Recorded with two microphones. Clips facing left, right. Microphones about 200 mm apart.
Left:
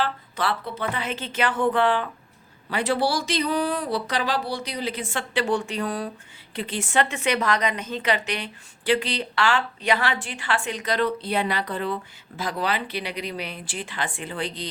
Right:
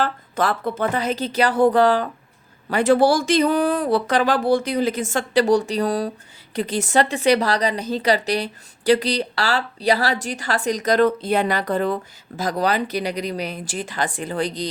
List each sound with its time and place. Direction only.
0.0 s a woman's voice: 45° right (ahead or behind)